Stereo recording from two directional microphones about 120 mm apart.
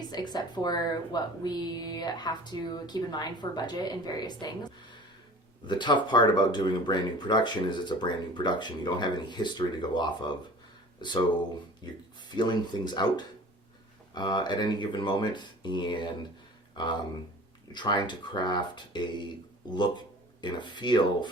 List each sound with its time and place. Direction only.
0.1 s speech: 35° left (ahead or behind)